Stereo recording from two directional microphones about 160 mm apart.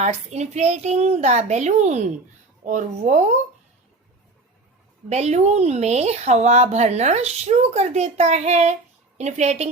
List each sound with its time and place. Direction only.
0.0 s speech: 45° right (ahead or behind)
5.0 s speech: 45° right (ahead or behind)